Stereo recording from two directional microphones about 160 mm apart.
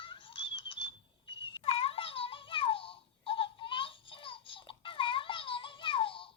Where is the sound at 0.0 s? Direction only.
30° left (ahead or behind).